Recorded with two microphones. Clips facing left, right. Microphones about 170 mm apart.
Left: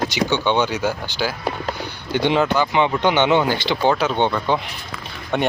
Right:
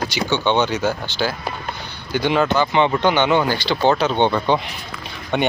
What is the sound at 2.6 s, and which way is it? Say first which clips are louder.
Speech: right 1 dB; 10° left (ahead or behind).